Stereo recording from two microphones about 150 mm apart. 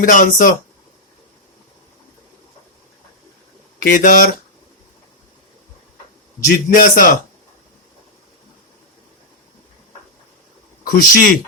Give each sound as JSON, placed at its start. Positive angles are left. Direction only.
{"t": 0.0, "sound": "a man's voice", "side_deg": 65}
{"t": 3.8, "sound": "a man's voice", "side_deg": 65}
{"t": 6.5, "sound": "a man's voice", "side_deg": 65}
{"t": 10.8, "sound": "a man's voice", "side_deg": 60}